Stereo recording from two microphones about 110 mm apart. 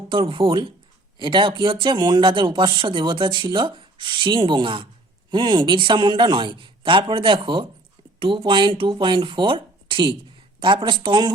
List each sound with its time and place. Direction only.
0.1 s speech: 50° right (ahead or behind)